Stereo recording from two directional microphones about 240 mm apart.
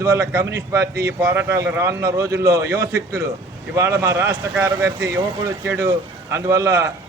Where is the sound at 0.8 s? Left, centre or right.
Right.